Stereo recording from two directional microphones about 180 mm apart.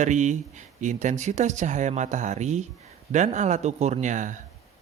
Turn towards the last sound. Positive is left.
turn(degrees=-45)  # may be behind; listen again after turning